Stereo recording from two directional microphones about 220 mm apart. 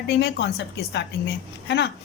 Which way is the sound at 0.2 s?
50° left (ahead or behind).